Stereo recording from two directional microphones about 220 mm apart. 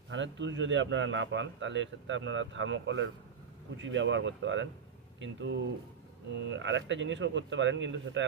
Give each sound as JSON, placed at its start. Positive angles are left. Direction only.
{"t": 0.1, "sound": "a man's voice", "side_deg": -55}